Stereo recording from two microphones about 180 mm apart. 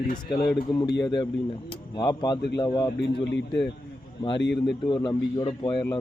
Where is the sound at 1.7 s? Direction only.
20° left (ahead or behind).